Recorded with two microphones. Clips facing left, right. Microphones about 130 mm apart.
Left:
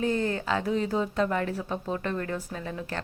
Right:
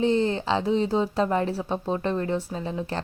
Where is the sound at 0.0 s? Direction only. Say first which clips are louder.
Right 5 dB; 25° right (ahead or behind).